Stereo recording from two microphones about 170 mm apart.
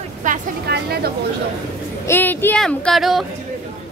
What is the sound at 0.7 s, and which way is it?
Speech, 70° right (ahead or behind).